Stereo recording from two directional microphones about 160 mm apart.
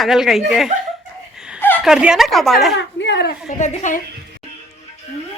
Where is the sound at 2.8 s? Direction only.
90° left.